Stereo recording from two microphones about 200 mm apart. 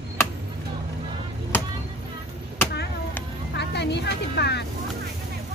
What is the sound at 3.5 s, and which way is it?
Music, 60° left (ahead or behind).